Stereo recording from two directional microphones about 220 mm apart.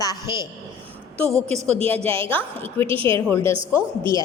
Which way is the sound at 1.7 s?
25° right (ahead or behind).